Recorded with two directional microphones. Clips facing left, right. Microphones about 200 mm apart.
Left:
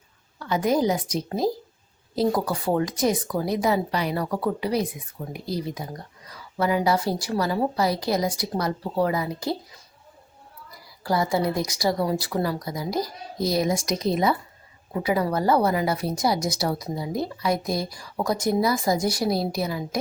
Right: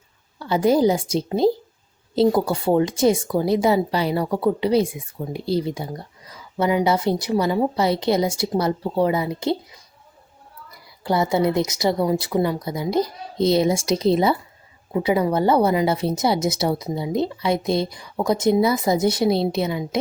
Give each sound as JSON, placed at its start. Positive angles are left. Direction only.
{"t": 0.3, "sound": "speech", "side_deg": -30}
{"t": 10.7, "sound": "speech", "side_deg": -25}